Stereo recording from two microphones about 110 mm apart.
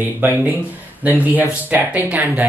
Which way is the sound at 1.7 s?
15° right (ahead or behind).